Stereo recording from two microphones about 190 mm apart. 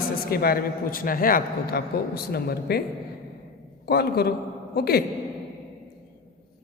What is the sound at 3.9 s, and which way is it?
A man's voice, 55° left (ahead or behind).